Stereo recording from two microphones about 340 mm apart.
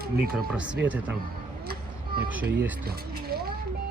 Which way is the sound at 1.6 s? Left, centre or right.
Right.